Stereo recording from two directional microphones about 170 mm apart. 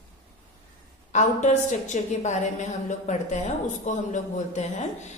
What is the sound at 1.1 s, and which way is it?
A woman's voice, 45° left (ahead or behind).